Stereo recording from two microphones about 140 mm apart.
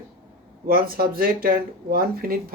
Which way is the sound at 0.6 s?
90° right.